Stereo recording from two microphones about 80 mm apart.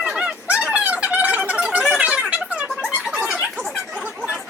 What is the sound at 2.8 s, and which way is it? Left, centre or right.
Squeak, centre.